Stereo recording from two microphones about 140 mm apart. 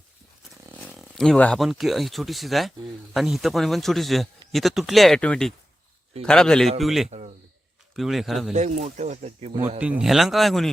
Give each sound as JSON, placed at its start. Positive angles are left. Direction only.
{"t": 0.9, "sound": "speech", "side_deg": -5}
{"t": 7.1, "sound": "a sound", "side_deg": -55}
{"t": 7.9, "sound": "speech", "side_deg": 0}
{"t": 8.5, "sound": "speech", "side_deg": -55}
{"t": 9.8, "sound": "speech", "side_deg": -5}